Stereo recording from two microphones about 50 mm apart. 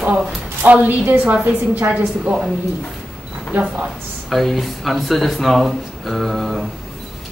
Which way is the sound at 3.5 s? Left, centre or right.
Right.